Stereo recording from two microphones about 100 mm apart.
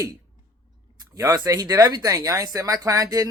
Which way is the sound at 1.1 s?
35° right (ahead or behind).